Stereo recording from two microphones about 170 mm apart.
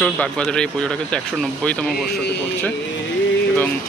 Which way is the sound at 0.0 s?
5° left (ahead or behind).